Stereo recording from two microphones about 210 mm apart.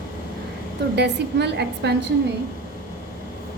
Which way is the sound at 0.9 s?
55° right (ahead or behind).